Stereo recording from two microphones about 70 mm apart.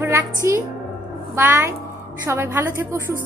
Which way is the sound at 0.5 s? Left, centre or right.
Right.